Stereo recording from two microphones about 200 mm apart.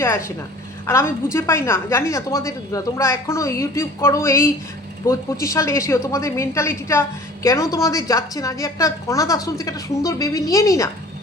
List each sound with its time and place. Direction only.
0.0 s a woman's voice: 15° left (ahead or behind)